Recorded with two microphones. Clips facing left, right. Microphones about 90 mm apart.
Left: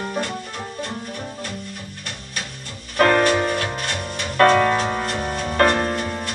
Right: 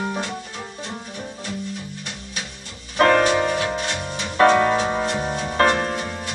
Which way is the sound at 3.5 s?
55° left (ahead or behind).